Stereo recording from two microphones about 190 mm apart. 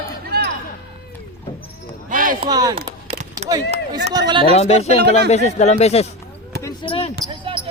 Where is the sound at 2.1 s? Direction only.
45° right (ahead or behind).